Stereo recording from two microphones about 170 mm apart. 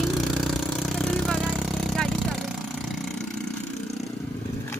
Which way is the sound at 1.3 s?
Centre (ahead or behind).